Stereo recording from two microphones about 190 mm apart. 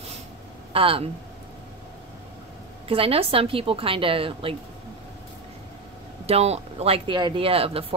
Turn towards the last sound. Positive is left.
turn(degrees=-30)  # may be behind; listen again after turning